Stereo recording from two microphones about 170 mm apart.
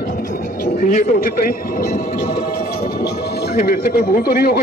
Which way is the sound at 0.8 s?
50° left (ahead or behind).